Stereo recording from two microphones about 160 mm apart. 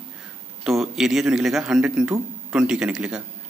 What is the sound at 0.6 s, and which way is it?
A man's voice, centre (ahead or behind).